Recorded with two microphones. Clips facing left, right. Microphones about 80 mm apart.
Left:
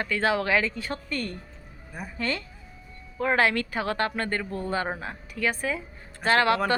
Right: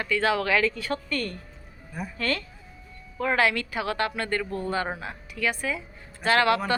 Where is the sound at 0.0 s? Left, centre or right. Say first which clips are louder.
Right 1 dB; left.